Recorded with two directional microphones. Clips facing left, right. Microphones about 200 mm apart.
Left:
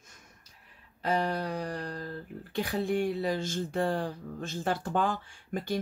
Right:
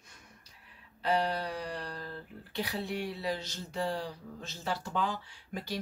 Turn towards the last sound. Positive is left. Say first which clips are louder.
# left 6 dB
turn(degrees=50)  # may be behind; listen again after turning